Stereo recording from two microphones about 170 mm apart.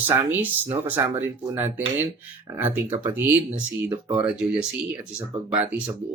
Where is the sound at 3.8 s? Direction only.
25° right (ahead or behind).